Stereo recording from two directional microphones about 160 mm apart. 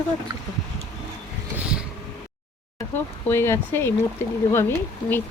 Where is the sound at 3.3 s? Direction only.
15° left (ahead or behind).